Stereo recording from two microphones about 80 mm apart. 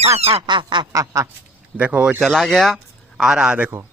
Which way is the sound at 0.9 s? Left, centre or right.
Right.